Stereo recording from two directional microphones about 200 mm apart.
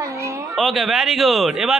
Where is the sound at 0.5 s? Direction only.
Centre (ahead or behind).